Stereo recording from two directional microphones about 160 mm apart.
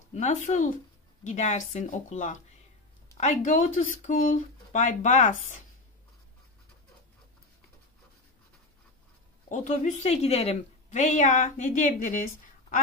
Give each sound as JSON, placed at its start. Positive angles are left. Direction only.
{"t": 0.1, "sound": "a woman's voice", "side_deg": 45}
{"t": 9.5, "sound": "a woman's voice", "side_deg": 50}